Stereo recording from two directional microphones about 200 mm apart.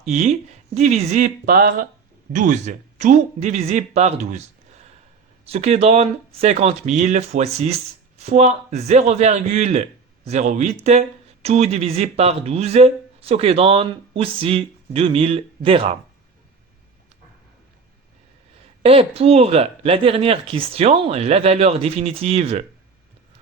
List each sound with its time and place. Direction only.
0.1 s speech: 35° right (ahead or behind)
18.8 s speech: 30° right (ahead or behind)